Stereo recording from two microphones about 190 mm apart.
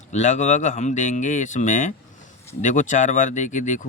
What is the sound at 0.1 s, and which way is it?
Speech, 40° left (ahead or behind).